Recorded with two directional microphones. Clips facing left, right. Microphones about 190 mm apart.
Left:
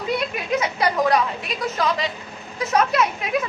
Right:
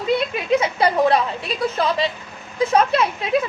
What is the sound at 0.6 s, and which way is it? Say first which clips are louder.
A woman's voice: right 3 dB; 30° right (ahead or behind).